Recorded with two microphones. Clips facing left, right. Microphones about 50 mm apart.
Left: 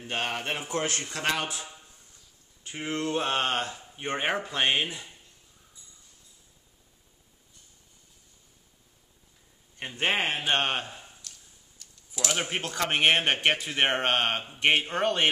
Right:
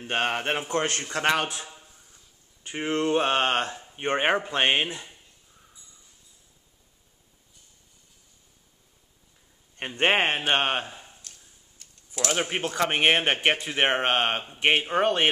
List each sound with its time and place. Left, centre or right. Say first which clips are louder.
0.0 s speech: right 5 dB; right
9.8 s speech: right 5 dB; right
10.5 s speech: right 3 dB; centre
11.8 s typing: even; right
12.3 s speech: right 3 dB; centre